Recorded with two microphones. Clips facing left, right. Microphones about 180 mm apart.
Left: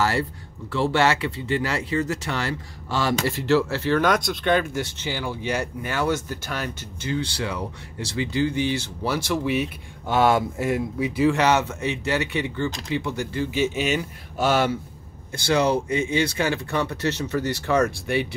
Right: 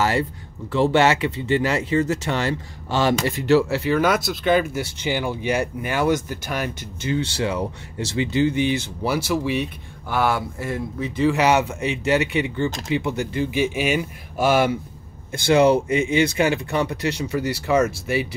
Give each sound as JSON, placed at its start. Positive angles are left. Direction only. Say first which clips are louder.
{"t": 0.0, "sound": "speech", "louder": "right 2 dB", "side_deg": -20}
{"t": 10.0, "sound": "speech", "louder": "left 3 dB", "side_deg": 20}
{"t": 11.2, "sound": "speech", "louder": "right 2 dB", "side_deg": -10}
{"t": 16.1, "sound": "speech", "louder": "right 4 dB", "side_deg": -15}